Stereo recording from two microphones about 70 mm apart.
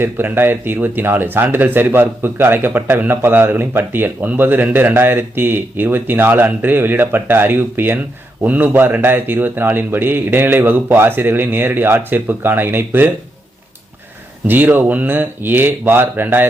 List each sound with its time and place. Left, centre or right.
0.0 s speech: right
14.4 s speech: right